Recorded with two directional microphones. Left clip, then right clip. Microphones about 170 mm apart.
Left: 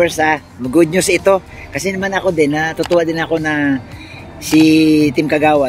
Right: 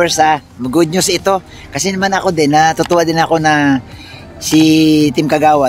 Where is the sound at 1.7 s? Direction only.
25° right (ahead or behind).